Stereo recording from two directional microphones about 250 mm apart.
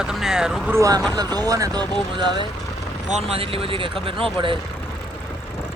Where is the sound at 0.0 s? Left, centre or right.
Centre.